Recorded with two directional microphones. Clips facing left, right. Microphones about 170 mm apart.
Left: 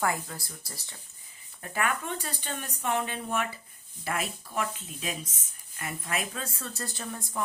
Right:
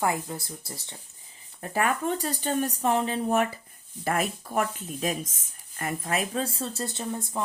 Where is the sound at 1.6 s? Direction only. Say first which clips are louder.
Right 5 dB; 35° right (ahead or behind).